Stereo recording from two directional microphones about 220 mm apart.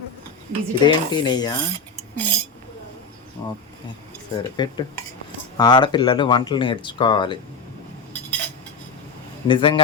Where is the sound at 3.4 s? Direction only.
20° left (ahead or behind).